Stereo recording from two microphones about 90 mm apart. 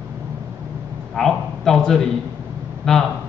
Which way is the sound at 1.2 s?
5° left (ahead or behind).